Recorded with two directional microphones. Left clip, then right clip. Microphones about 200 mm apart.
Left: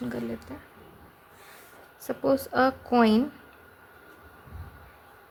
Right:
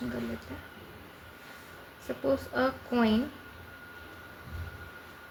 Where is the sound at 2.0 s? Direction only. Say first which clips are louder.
Left 4 dB; 30° left (ahead or behind).